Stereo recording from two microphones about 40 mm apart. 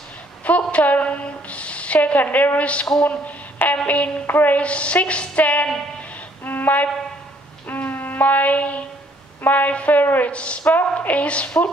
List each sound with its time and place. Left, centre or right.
0.5 s a woman's voice: left
2.6 s a woman's voice: left
4.3 s a sound: left
4.6 s a woman's voice: left
6.4 s music: left
9.5 s a sound: left
9.8 s a woman's voice: left
10.6 s a woman's voice: left